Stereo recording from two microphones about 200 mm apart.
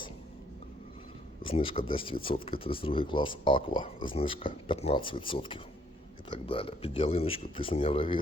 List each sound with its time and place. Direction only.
1.5 s speech: 25° left (ahead or behind)